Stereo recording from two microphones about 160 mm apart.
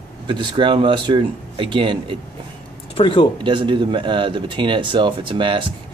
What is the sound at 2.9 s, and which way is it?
Speech, 30° left (ahead or behind).